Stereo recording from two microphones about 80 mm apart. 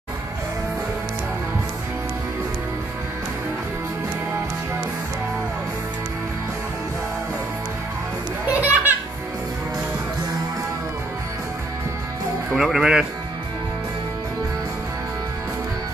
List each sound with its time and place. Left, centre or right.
8.5 s children playing: right
12.5 s speech: centre